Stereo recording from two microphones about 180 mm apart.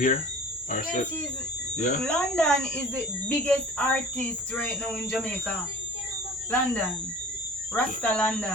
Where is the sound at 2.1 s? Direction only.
5° left (ahead or behind).